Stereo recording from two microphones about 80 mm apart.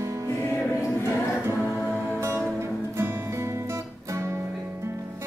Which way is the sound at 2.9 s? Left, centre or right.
Right.